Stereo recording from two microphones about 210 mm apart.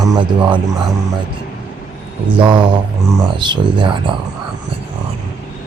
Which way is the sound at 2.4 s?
25° right (ahead or behind).